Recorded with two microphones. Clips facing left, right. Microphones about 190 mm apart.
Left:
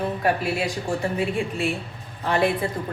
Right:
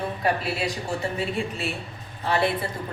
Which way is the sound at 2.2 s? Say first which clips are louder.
Left 2 dB; 50° left (ahead or behind).